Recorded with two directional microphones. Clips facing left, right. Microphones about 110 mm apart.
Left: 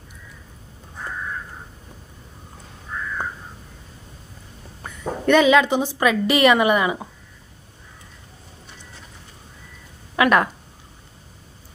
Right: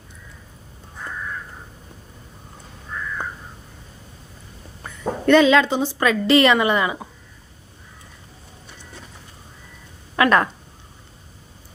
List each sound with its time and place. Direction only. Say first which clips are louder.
5.2 s a woman's voice: right 1 dB; 15° left (ahead or behind)
10.2 s speech: even; 10° left (ahead or behind)